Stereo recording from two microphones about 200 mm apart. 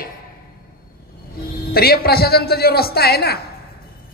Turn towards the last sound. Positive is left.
turn(degrees=50)  # may be behind; listen again after turning